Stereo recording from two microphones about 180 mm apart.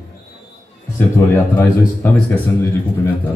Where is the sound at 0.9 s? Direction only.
10° left (ahead or behind).